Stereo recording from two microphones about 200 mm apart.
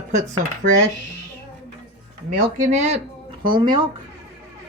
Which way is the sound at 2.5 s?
35° right (ahead or behind).